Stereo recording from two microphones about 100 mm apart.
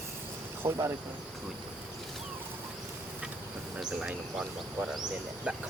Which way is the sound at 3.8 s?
10° right (ahead or behind).